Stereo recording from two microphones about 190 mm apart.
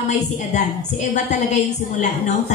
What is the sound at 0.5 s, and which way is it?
A woman's voice, 40° left (ahead or behind).